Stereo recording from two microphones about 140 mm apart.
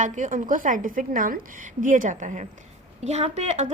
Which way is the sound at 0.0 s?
65° right (ahead or behind).